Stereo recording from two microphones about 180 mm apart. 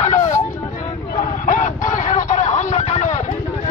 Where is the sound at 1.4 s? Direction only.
45° left (ahead or behind).